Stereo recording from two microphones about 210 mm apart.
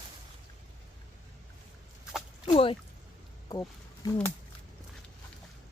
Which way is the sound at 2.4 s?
25° left (ahead or behind).